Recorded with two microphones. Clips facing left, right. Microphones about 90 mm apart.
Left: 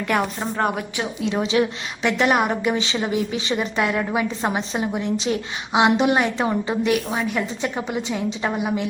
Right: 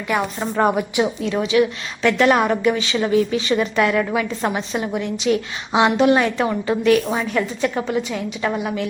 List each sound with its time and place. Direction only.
0.5 s a woman's voice: 5° right (ahead or behind)
1.2 s a woman's voice: 20° left (ahead or behind)
2.0 s a woman's voice: 15° left (ahead or behind)
5.7 s a woman's voice: 15° left (ahead or behind)
6.9 s a woman's voice: 5° left (ahead or behind)
7.8 s a woman's voice: 20° left (ahead or behind)